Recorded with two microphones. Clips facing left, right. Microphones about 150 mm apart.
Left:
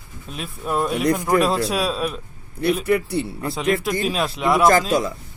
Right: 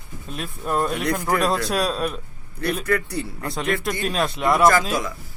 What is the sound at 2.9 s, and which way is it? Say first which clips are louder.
Speech: left 3 dB; 20° left (ahead or behind).